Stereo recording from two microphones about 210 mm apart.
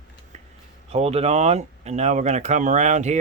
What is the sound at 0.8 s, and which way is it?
Speech, 30° right (ahead or behind).